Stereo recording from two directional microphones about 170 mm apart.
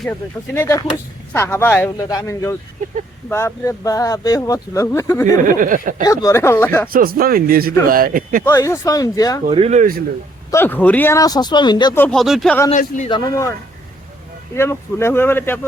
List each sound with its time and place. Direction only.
0.0 s speech: 10° left (ahead or behind)
5.4 s speech: 50° right (ahead or behind)
6.1 s speech: 20° left (ahead or behind)
6.9 s speech: 60° right (ahead or behind)
8.4 s speech: 20° left (ahead or behind)
9.5 s speech: 35° right (ahead or behind)
10.5 s speech: 10° left (ahead or behind)
11.9 s speech: 5° left (ahead or behind)
12.7 s a man's voice: 45° left (ahead or behind)
13.1 s speech: 25° left (ahead or behind)
14.5 s speech: 15° left (ahead or behind)